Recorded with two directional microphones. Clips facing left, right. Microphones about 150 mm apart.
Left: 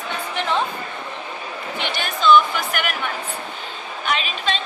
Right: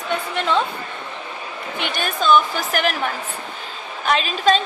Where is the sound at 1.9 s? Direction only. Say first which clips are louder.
Left 1 dB; 45° right (ahead or behind).